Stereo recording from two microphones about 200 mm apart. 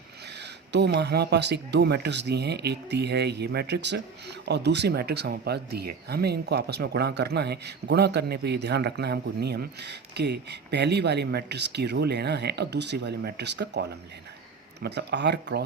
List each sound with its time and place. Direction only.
0.7 s speech: 60° right (ahead or behind)